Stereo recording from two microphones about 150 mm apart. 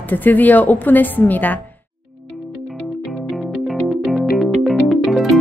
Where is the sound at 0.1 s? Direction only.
10° left (ahead or behind).